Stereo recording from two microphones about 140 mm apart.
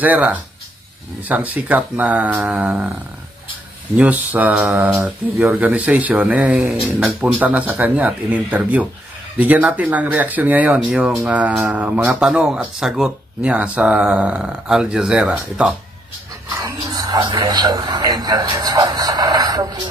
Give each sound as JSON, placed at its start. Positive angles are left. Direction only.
{"t": 0.0, "sound": "speech", "side_deg": -10}
{"t": 3.9, "sound": "speech", "side_deg": -10}
{"t": 16.5, "sound": "speech", "side_deg": -25}